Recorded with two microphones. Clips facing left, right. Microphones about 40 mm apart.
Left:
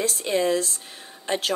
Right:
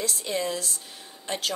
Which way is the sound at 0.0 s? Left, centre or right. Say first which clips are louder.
Left 6 dB; left.